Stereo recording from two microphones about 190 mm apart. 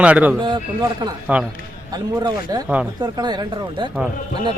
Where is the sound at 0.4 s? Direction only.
25° right (ahead or behind).